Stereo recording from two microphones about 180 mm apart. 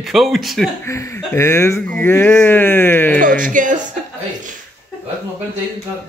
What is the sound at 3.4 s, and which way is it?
Speech, 45° right (ahead or behind).